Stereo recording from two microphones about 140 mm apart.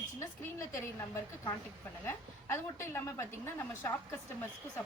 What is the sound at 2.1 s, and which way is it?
A woman's voice, 15° left (ahead or behind).